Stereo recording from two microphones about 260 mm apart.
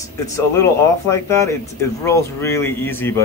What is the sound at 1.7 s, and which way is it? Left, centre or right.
Speech, centre.